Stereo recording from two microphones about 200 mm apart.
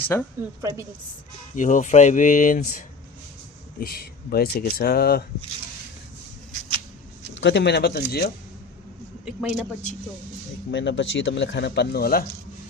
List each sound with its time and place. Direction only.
0.1 s speech: 10° left (ahead or behind)
0.6 s a woman's voice: 15° right (ahead or behind)
1.5 s speech: 40° left (ahead or behind)
7.3 s speech: 60° left (ahead or behind)
9.2 s a man's voice: 5° right (ahead or behind)
10.7 s speech: 65° left (ahead or behind)